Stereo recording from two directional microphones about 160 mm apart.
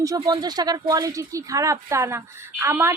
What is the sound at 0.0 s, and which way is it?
A woman's voice, 25° right (ahead or behind).